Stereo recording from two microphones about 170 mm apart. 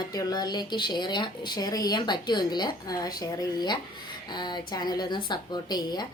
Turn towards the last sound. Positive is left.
turn(degrees=25)  # may be behind; listen again after turning